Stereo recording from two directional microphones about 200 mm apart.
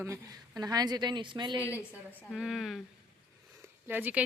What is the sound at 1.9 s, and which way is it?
Speech, 10° left (ahead or behind).